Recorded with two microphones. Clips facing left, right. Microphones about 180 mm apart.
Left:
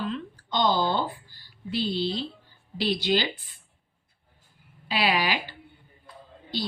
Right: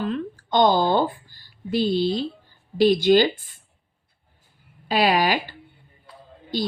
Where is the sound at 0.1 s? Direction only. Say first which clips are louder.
Right 7 dB; 50° right (ahead or behind).